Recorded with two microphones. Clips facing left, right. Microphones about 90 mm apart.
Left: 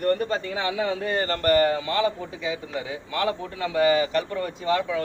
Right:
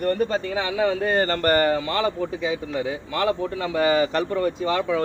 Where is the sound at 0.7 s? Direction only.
50° right (ahead or behind).